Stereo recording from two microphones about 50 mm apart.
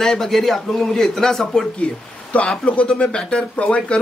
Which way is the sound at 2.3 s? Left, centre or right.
Left.